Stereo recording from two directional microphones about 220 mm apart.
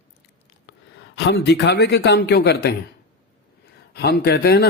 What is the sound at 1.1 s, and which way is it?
A man's voice, 55° left (ahead or behind).